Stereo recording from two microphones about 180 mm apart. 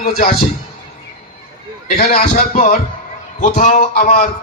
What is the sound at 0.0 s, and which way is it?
Speech, 55° left (ahead or behind).